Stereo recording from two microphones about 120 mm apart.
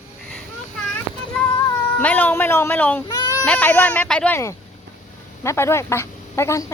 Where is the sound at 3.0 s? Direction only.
35° left (ahead or behind).